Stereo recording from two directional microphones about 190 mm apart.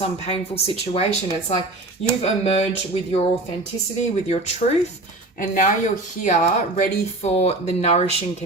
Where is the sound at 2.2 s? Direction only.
35° left (ahead or behind).